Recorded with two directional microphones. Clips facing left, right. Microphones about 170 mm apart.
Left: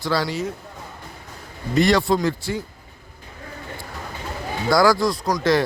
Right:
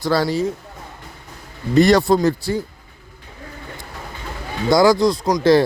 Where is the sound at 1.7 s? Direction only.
40° right (ahead or behind).